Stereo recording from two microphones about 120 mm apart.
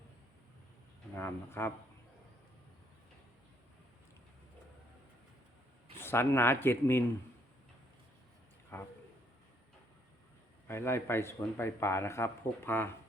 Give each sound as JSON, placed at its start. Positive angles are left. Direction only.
{"t": 1.1, "sound": "speech", "side_deg": 20}
{"t": 6.0, "sound": "speech", "side_deg": 20}
{"t": 8.7, "sound": "speech", "side_deg": 20}
{"t": 10.7, "sound": "speech", "side_deg": 20}